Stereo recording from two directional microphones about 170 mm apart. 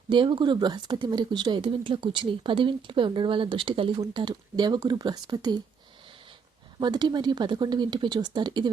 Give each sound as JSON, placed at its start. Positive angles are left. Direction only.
{"t": 0.1, "sound": "speech", "side_deg": -30}
{"t": 6.7, "sound": "speech", "side_deg": -25}